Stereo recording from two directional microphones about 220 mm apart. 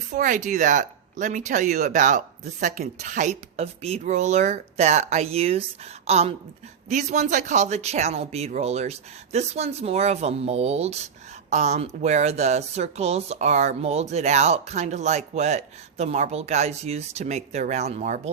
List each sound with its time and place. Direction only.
0.1 s speech: 35° right (ahead or behind)